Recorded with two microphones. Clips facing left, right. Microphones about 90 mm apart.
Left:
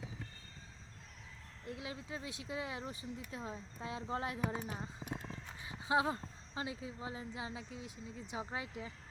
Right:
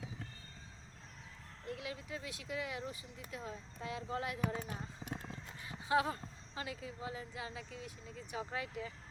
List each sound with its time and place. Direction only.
1.6 s speech: 25° left (ahead or behind)
5.6 s speech: 20° left (ahead or behind)